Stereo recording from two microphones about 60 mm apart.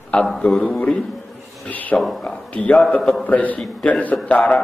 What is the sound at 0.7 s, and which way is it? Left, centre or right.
Speech, left.